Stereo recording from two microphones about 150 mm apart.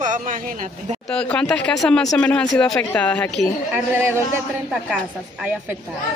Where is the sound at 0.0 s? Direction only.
55° right (ahead or behind).